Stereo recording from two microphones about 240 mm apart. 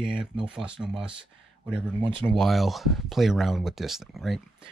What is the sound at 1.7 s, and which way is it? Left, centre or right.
Speech, right.